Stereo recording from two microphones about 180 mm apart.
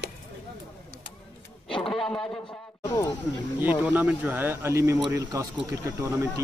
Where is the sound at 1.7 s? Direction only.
5° left (ahead or behind).